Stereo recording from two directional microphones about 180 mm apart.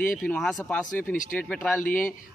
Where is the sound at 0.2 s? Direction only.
Centre (ahead or behind).